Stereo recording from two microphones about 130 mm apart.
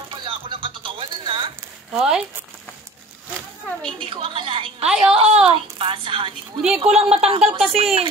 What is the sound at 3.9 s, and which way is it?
A woman's voice, 45° right (ahead or behind).